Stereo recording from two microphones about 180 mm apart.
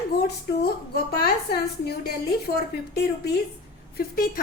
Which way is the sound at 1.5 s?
60° left (ahead or behind).